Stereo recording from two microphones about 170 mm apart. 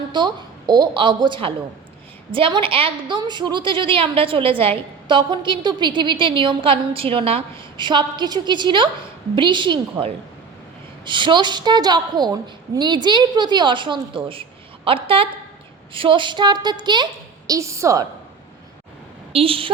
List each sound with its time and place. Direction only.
0.1 s a woman's voice: 25° right (ahead or behind)
19.3 s a woman's voice: 35° right (ahead or behind)